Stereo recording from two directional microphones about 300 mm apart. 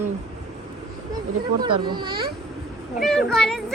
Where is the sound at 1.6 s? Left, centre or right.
Centre.